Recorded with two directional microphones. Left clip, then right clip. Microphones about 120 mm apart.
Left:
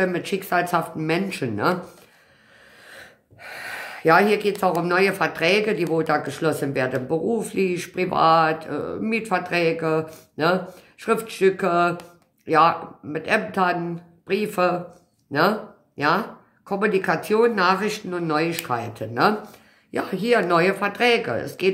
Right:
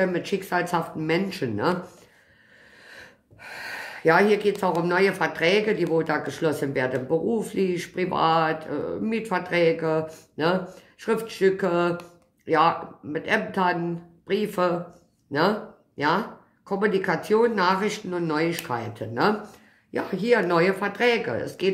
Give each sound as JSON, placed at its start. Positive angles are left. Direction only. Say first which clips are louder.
{"t": 0.0, "sound": "speech", "louder": "left 1 dB", "side_deg": 30}
{"t": 2.9, "sound": "gasp", "louder": "left 2 dB", "side_deg": 25}
{"t": 4.8, "sound": "speech", "louder": "left 2 dB", "side_deg": 25}
{"t": 16.0, "sound": "speech", "louder": "left 3 dB", "side_deg": 25}